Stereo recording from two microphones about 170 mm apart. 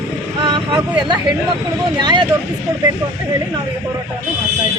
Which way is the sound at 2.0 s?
25° right (ahead or behind).